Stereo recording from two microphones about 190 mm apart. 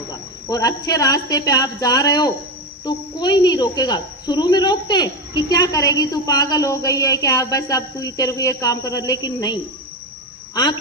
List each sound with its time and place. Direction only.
0.1 s speech: 20° left (ahead or behind)